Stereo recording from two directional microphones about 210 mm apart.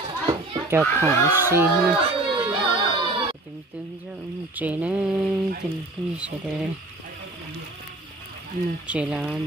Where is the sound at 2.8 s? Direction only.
25° right (ahead or behind).